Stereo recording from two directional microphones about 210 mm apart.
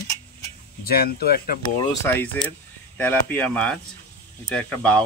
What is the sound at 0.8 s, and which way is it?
Speech, 45° left (ahead or behind).